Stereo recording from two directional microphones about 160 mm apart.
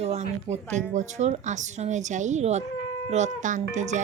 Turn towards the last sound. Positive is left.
turn(degrees=-50)  # may be behind; listen again after turning